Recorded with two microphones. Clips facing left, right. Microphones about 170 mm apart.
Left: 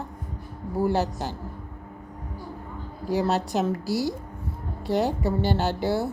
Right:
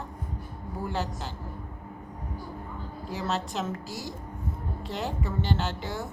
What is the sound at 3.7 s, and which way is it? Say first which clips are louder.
A woman's voice: left 10 dB; 35° left (ahead or behind).